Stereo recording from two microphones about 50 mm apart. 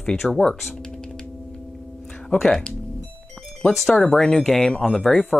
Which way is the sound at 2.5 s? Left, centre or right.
Centre.